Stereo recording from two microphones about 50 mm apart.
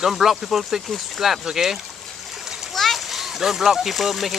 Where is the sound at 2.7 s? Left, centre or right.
Centre.